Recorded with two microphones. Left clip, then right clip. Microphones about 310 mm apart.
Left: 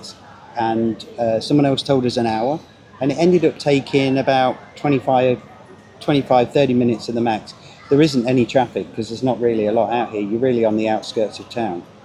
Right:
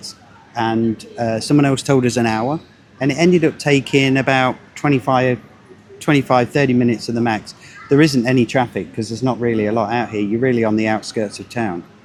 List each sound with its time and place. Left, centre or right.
0.5 s speech: right